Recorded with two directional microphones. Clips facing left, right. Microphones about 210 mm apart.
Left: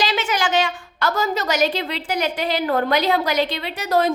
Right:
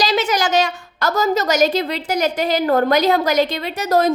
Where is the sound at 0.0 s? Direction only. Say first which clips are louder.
Right 4 dB; 40° right (ahead or behind).